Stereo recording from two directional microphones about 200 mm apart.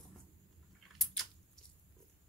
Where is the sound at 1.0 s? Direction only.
Centre (ahead or behind).